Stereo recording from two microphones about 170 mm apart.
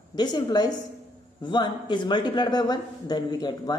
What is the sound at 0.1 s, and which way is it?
A man's voice, 25° left (ahead or behind).